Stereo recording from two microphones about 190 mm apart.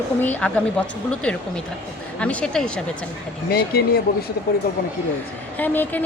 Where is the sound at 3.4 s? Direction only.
55° left (ahead or behind).